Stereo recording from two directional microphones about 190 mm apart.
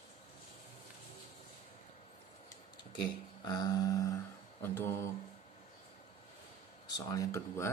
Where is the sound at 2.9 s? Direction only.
20° left (ahead or behind).